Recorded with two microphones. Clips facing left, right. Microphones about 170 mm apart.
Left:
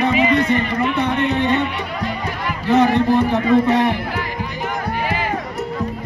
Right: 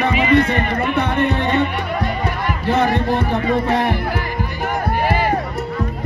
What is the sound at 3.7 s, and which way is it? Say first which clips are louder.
Speech: left 2 dB; 55° right (ahead or behind).